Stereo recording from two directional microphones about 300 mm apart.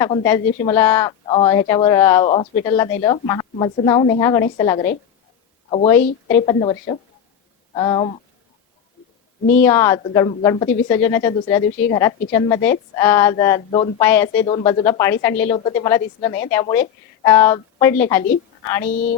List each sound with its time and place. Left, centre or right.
0.1 s a woman's voice: centre
9.6 s a woman's voice: centre
14.1 s a woman's voice: centre